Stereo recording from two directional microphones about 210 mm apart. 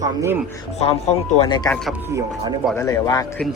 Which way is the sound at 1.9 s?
15° right (ahead or behind).